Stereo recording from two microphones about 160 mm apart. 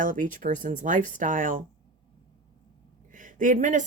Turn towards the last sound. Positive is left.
turn(degrees=-50)  # may be behind; listen again after turning